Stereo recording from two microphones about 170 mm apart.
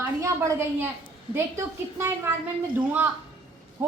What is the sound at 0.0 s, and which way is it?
A woman's voice, 15° right (ahead or behind).